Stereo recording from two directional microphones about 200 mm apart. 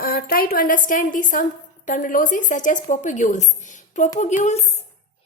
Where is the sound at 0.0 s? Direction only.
45° left (ahead or behind).